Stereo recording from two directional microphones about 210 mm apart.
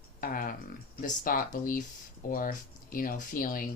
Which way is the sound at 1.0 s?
40° left (ahead or behind).